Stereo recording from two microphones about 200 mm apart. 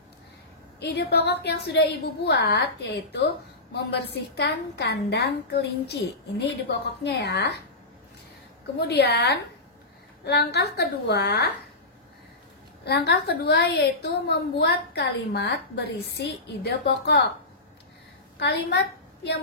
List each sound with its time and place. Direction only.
0.7 s a woman's voice: 55° left (ahead or behind)
8.8 s a woman's voice: 55° left (ahead or behind)
12.8 s a woman's voice: 55° left (ahead or behind)
18.4 s a woman's voice: 55° left (ahead or behind)